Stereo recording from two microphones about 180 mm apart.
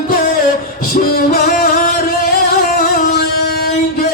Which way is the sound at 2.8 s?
60° left (ahead or behind).